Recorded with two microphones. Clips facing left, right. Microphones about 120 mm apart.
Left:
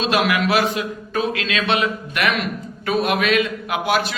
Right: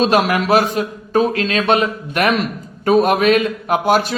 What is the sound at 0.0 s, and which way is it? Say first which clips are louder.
A man's voice: right 4 dB; 40° right (ahead or behind).